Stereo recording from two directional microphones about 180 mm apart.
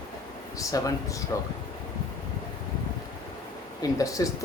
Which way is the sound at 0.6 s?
20° left (ahead or behind).